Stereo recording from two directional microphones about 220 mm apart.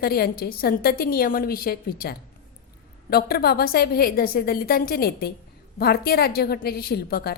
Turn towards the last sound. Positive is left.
turn(degrees=45)  # may be behind; listen again after turning